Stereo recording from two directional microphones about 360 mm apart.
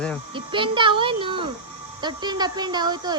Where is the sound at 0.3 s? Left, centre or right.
Centre.